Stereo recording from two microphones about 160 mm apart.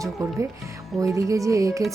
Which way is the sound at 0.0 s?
20° right (ahead or behind).